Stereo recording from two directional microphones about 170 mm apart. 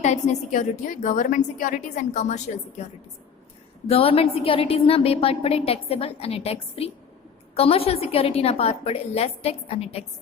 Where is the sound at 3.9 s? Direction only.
35° left (ahead or behind).